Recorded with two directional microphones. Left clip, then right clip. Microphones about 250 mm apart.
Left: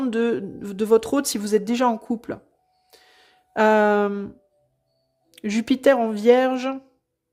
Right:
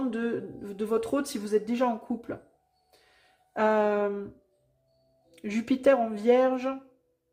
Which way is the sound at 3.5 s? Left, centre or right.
Left.